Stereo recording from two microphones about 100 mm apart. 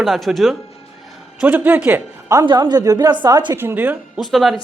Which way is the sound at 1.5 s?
20° right (ahead or behind).